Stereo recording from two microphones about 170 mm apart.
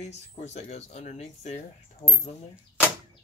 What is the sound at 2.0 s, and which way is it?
Speech, 30° left (ahead or behind).